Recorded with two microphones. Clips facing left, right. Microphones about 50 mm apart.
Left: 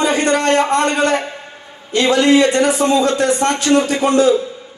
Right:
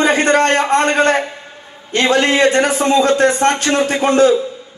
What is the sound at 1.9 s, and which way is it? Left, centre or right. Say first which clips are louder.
A man's voice: left 1 dB; right.